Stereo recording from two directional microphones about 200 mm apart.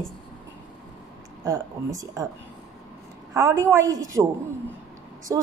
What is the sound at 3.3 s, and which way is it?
Speech, 15° right (ahead or behind).